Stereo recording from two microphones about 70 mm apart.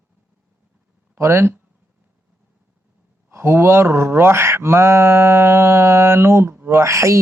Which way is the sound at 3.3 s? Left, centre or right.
Right.